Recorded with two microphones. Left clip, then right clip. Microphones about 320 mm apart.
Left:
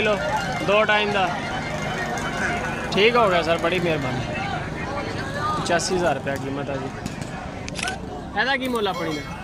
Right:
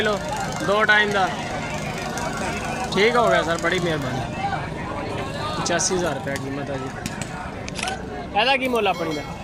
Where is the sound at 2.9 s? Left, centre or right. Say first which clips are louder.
Even; centre.